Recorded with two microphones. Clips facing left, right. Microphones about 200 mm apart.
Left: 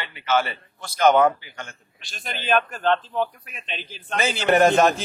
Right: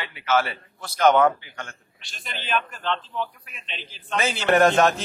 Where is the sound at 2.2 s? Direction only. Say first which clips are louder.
Left 5 dB; 50° left (ahead or behind).